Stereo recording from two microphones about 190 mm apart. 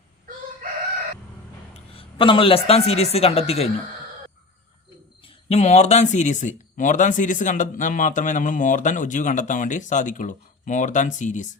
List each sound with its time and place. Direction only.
1.7 s a man's voice: 30° left (ahead or behind)
5.2 s speech: 35° left (ahead or behind)